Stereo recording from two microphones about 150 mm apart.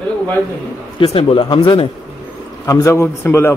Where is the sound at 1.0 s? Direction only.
40° left (ahead or behind).